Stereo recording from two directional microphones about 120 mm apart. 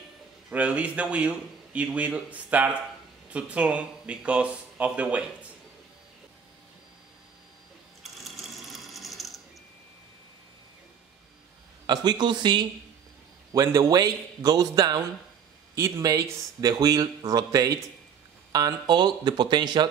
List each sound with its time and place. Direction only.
0.5 s a man's voice: 10° right (ahead or behind)
8.0 s sewing machine: centre (ahead or behind)
11.8 s speech: 35° right (ahead or behind)
13.5 s a man's voice: 30° right (ahead or behind)